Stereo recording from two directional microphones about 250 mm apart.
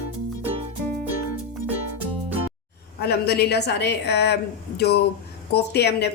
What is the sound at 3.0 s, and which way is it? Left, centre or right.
A woman's voice, left.